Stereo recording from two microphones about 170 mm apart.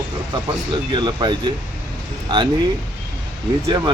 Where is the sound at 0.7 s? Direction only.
25° right (ahead or behind).